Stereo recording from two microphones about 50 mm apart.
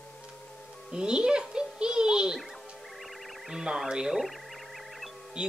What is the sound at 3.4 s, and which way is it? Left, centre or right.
Speech, centre.